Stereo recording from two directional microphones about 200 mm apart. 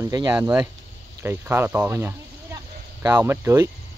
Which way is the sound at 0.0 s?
20° right (ahead or behind).